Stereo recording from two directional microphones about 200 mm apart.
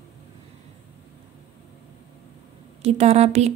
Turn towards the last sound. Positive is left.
turn(degrees=-35)  # may be behind; listen again after turning